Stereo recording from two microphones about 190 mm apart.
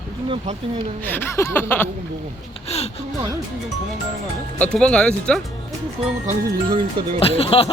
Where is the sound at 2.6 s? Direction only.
35° left (ahead or behind).